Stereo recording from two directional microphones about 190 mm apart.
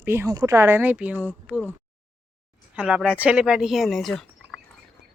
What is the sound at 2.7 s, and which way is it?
A woman's voice, 5° right (ahead or behind).